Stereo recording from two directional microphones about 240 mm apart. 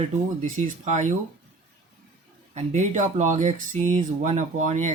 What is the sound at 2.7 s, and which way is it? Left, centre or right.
Speech, right.